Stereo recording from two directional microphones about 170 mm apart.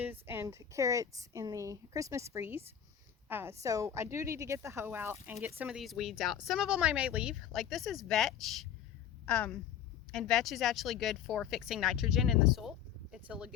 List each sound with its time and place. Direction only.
0.0 s a woman's voice: 10° right (ahead or behind)